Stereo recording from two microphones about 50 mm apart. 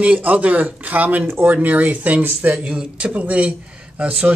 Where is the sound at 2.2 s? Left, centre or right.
Right.